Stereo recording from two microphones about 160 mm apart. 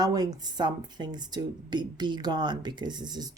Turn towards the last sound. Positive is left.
turn(degrees=-25)  # may be behind; listen again after turning